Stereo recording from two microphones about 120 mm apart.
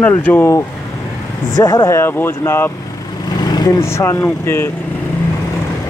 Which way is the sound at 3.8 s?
25° left (ahead or behind).